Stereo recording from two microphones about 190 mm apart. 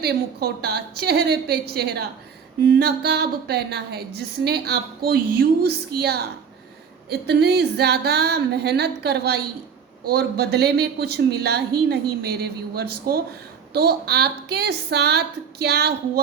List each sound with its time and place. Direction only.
0.0 s a woman's voice: 55° right (ahead or behind)